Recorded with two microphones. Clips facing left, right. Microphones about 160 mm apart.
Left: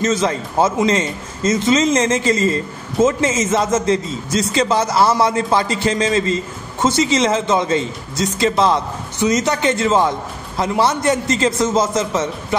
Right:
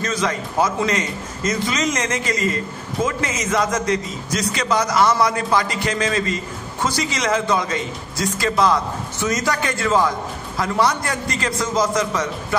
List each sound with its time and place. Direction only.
0.0 s a man's voice: 25° left (ahead or behind)